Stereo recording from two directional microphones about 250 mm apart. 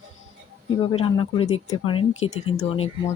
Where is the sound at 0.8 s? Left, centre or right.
Left.